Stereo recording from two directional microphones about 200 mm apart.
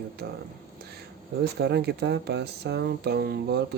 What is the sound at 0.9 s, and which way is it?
Speech, 55° right (ahead or behind).